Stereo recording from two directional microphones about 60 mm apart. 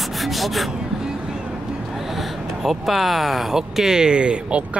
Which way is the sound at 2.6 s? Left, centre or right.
Centre.